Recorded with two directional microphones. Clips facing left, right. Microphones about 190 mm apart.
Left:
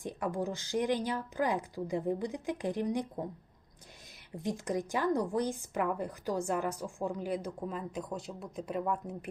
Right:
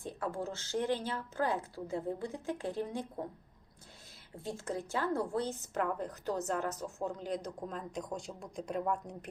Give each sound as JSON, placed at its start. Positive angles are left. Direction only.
{"t": 0.0, "sound": "a woman's voice", "side_deg": 15}
{"t": 4.4, "sound": "a woman's voice", "side_deg": 15}